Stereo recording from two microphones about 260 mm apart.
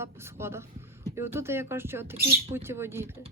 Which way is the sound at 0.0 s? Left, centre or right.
Centre.